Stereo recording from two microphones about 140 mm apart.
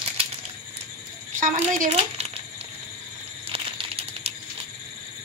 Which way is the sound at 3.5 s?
45° right (ahead or behind).